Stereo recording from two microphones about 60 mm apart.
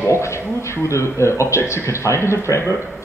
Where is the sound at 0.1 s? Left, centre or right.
Left.